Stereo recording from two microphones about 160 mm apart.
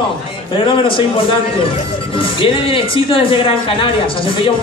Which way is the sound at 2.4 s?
35° left (ahead or behind).